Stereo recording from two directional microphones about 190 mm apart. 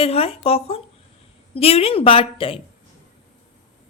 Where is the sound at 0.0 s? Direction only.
30° left (ahead or behind).